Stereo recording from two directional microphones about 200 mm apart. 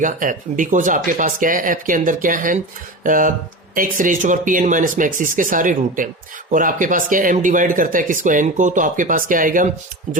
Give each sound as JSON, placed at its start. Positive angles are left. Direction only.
{"t": 0.0, "sound": "speech", "side_deg": -40}